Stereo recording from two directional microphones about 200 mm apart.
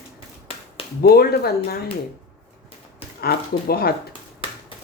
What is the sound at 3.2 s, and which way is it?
Speech, 50° left (ahead or behind).